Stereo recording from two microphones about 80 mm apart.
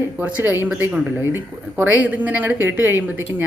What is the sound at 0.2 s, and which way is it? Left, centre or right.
A woman's voice, right.